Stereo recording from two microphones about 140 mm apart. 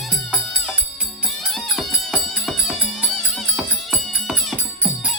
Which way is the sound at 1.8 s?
Centre (ahead or behind).